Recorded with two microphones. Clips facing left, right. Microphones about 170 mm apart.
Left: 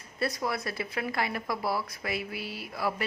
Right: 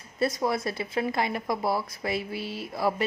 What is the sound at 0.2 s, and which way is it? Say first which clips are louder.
Speech: right 5 dB; 25° right (ahead or behind).